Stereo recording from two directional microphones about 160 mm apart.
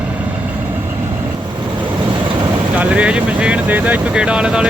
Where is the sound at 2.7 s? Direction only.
10° right (ahead or behind).